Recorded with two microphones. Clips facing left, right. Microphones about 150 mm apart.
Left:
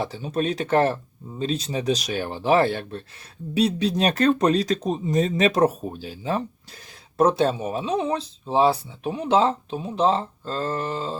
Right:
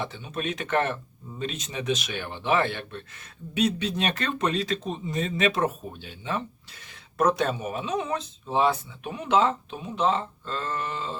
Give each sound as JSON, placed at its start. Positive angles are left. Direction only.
{"t": 0.0, "sound": "speech", "side_deg": 35}